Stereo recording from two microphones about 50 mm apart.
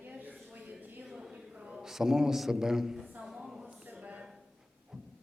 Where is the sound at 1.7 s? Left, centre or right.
Centre.